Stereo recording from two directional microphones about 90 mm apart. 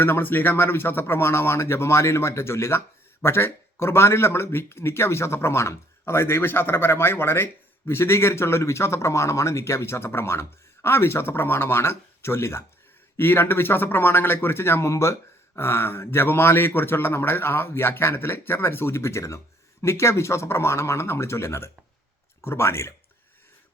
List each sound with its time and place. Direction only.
0.0 s speech: 25° left (ahead or behind)